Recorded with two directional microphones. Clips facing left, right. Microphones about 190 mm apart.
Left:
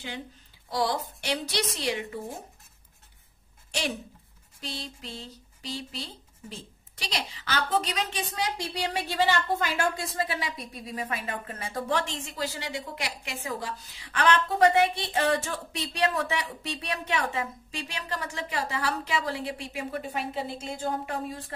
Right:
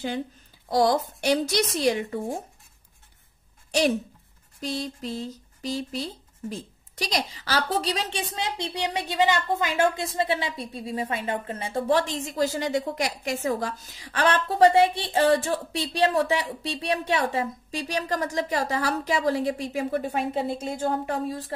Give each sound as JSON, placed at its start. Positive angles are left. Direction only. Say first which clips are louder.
{"t": 0.7, "sound": "a woman's voice", "louder": "right 7 dB", "side_deg": -45}
{"t": 4.6, "sound": "a woman's voice", "louder": "right 8 dB", "side_deg": -45}